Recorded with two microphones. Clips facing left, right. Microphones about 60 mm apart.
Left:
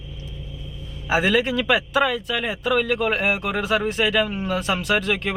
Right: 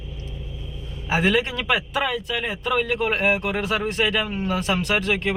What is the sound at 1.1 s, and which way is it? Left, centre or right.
Speech, centre.